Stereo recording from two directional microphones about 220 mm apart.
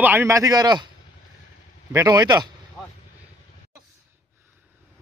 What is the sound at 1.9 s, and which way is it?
Speech, 15° right (ahead or behind).